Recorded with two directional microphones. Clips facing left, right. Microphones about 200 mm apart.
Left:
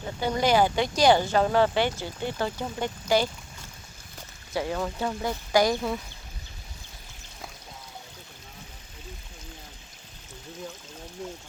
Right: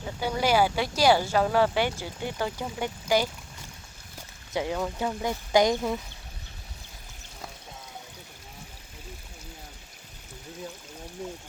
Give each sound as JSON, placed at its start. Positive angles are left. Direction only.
{"t": 0.2, "sound": "speech", "side_deg": -10}
{"t": 4.5, "sound": "speech", "side_deg": -10}